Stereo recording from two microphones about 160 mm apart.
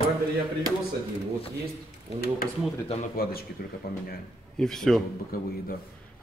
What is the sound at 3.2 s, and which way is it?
Speech, 70° left (ahead or behind).